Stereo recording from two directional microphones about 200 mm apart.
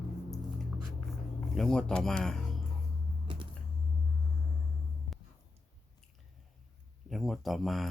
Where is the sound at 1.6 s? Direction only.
5° left (ahead or behind).